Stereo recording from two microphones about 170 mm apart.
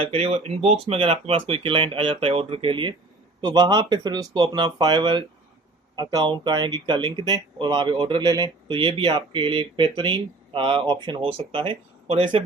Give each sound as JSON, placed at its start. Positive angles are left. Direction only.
{"t": 0.0, "sound": "speech", "side_deg": -35}